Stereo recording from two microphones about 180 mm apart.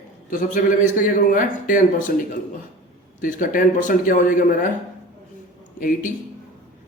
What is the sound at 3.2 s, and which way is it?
A man's voice, 50° left (ahead or behind).